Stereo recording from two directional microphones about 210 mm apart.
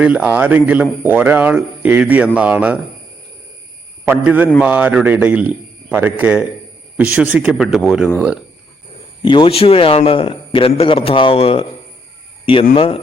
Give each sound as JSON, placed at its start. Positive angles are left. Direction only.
{"t": 0.0, "sound": "speech", "side_deg": -5}
{"t": 4.0, "sound": "speech", "side_deg": -10}
{"t": 9.2, "sound": "a man's voice", "side_deg": 25}
{"t": 12.7, "sound": "a man's voice", "side_deg": 25}